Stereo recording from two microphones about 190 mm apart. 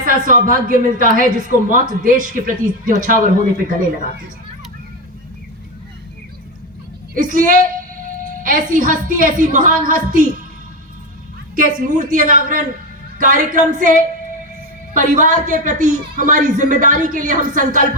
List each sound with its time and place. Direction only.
0.0 s a woman's voice: 45° right (ahead or behind)
7.2 s a woman's voice: 45° right (ahead or behind)
11.5 s a woman's voice: 45° right (ahead or behind)
14.9 s a woman's voice: 40° right (ahead or behind)